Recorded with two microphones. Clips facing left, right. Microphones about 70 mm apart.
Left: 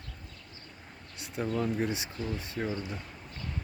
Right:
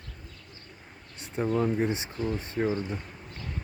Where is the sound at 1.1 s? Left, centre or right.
Right.